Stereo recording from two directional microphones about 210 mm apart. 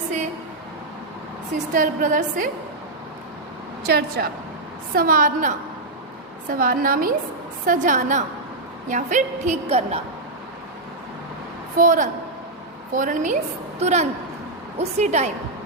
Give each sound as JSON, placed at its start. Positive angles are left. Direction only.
{"t": 1.7, "sound": "a woman's voice", "side_deg": -40}
{"t": 3.8, "sound": "a woman's voice", "side_deg": -50}
{"t": 11.8, "sound": "a woman's voice", "side_deg": -40}